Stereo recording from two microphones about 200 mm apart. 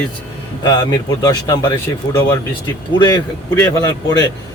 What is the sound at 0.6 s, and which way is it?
Speech, 20° left (ahead or behind).